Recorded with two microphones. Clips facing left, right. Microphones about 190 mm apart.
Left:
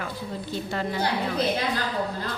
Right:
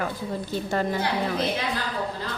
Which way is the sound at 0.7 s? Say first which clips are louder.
Right 4 dB; 45° right (ahead or behind).